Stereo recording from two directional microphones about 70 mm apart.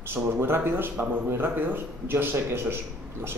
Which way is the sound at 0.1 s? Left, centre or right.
Right.